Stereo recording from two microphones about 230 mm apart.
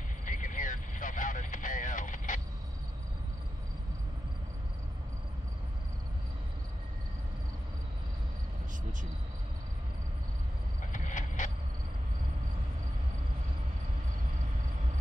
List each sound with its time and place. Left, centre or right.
0.2 s vehicle: left
10.9 s vehicle: left